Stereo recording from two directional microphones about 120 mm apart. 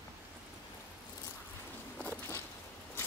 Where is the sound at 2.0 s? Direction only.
20° left (ahead or behind).